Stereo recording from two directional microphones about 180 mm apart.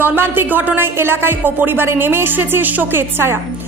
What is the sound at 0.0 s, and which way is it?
Speech, 10° right (ahead or behind).